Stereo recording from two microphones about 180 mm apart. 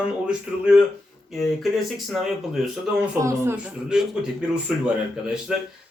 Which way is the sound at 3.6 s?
5° right (ahead or behind).